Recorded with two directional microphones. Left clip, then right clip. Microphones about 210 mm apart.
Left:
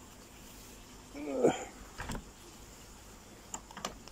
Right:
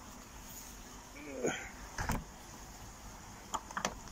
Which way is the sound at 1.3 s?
20° left (ahead or behind).